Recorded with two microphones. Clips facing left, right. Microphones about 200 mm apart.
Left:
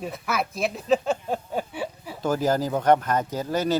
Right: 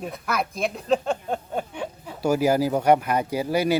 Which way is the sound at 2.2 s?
10° right (ahead or behind).